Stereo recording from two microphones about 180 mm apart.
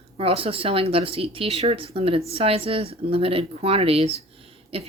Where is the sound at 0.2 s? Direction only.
30° right (ahead or behind).